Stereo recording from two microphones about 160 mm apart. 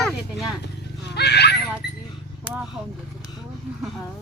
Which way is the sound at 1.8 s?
90° left.